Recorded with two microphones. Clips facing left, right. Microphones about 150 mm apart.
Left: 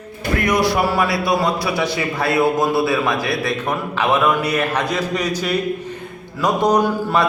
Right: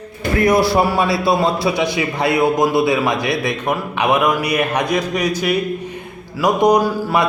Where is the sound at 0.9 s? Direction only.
25° right (ahead or behind).